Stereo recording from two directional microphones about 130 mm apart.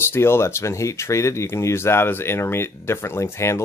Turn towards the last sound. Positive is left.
turn(degrees=20)  # may be behind; listen again after turning